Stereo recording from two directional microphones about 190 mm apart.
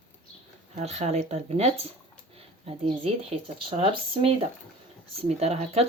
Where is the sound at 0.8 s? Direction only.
35° right (ahead or behind).